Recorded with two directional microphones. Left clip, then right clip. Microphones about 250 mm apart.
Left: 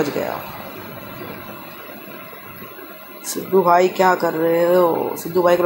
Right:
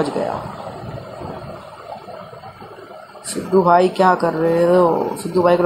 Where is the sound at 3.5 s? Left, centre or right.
Centre.